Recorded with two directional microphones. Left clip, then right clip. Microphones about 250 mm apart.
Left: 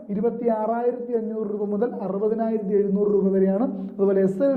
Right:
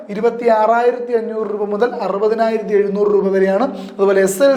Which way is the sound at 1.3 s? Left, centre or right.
Centre.